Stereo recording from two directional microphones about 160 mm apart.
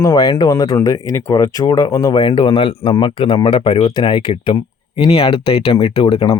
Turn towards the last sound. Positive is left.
turn(degrees=30)  # may be behind; listen again after turning